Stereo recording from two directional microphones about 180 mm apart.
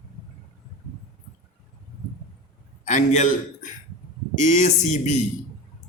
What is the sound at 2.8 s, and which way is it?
A man's voice, 40° left (ahead or behind).